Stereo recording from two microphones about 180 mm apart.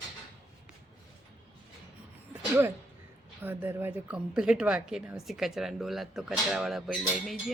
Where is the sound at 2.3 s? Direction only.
10° right (ahead or behind).